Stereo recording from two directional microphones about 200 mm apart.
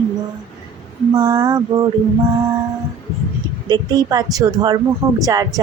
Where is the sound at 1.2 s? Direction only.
20° right (ahead or behind).